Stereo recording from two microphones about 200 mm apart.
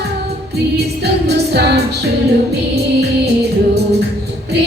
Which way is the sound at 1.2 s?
55° right (ahead or behind).